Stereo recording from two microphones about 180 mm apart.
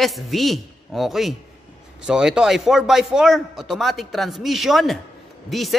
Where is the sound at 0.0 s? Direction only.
Centre (ahead or behind).